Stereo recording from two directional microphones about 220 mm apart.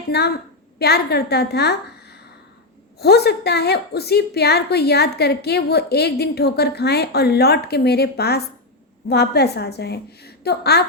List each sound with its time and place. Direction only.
0.1 s a woman's voice: 45° left (ahead or behind)